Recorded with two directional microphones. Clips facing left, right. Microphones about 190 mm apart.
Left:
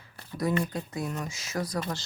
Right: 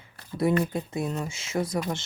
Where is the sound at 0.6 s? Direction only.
25° right (ahead or behind).